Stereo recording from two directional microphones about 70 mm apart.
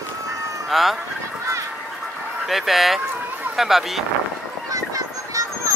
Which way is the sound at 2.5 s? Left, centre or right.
Centre.